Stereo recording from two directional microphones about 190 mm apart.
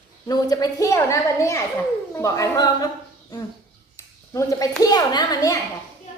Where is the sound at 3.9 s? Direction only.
15° left (ahead or behind).